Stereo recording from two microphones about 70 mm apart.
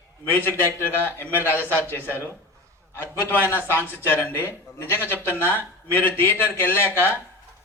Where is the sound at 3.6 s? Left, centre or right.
Left.